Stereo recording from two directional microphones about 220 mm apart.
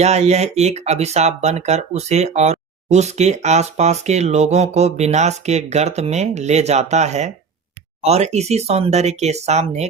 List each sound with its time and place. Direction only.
0.0 s speech: 30° right (ahead or behind)